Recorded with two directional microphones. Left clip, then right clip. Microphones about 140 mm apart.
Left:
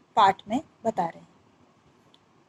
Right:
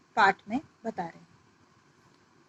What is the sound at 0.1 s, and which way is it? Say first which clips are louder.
A woman's voice: left 3 dB; 40° left (ahead or behind).